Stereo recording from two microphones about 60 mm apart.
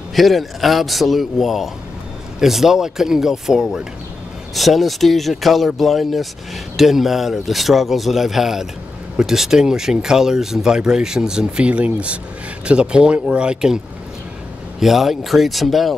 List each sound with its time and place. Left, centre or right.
0.1 s speech: centre
14.8 s speech: centre